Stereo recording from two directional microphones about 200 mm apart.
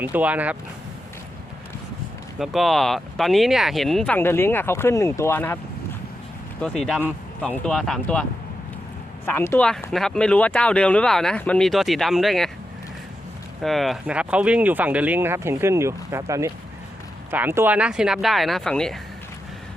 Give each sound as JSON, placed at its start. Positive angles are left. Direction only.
{"t": 0.0, "sound": "speech", "side_deg": -10}
{"t": 2.4, "sound": "speech", "side_deg": 0}
{"t": 6.6, "sound": "speech", "side_deg": 0}
{"t": 13.6, "sound": "speech", "side_deg": 0}